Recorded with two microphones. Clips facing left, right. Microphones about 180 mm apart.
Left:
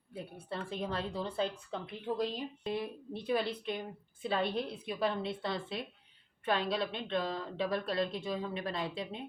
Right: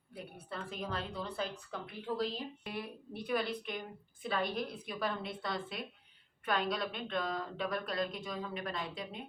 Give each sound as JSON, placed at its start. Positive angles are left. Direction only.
{"t": 0.1, "sound": "a woman's voice", "side_deg": 25}